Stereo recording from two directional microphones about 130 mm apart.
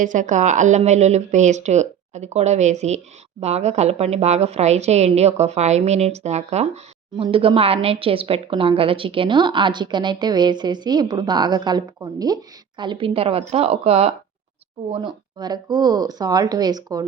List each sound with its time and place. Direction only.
0.0 s a woman's voice: 75° right (ahead or behind); by 6.7 s 60° right (ahead or behind)
7.2 s speech: 45° right (ahead or behind)
15.0 s speech: 30° right (ahead or behind)